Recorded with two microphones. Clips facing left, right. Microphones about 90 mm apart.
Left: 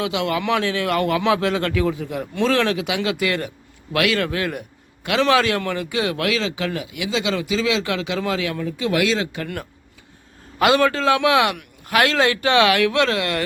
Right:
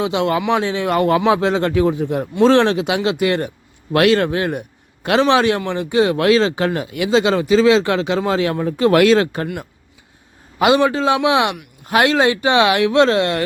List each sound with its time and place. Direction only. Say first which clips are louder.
0.0 s a man's voice: right 4 dB; 30° right (ahead or behind); by 9.4 s 55° right (ahead or behind)
10.6 s a man's voice: right 3 dB; 20° right (ahead or behind)